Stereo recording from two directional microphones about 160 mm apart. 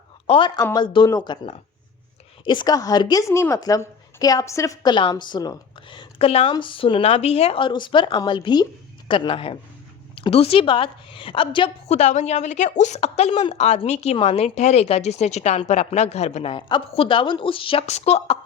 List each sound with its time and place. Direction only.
0.3 s a woman's voice: 30° left (ahead or behind)
11.9 s a woman's voice: 45° left (ahead or behind)